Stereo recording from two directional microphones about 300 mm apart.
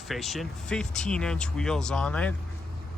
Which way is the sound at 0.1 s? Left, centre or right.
Centre.